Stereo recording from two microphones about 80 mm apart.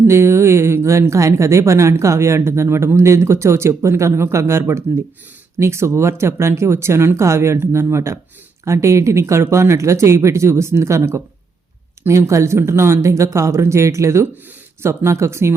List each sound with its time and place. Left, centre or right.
0.0 s speech: right